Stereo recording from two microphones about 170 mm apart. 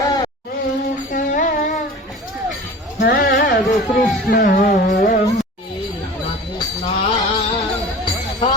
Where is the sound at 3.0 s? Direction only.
75° left (ahead or behind).